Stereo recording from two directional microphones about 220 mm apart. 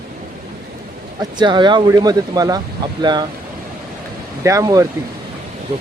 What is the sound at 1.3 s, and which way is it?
Speech, 20° right (ahead or behind).